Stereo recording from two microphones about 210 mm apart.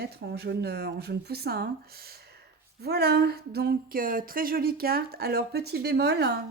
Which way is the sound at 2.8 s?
50° right (ahead or behind).